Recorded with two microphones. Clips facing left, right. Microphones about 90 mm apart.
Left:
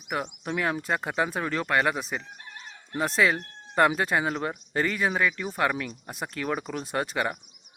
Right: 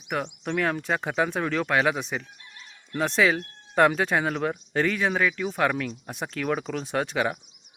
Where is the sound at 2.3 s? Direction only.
40° left (ahead or behind).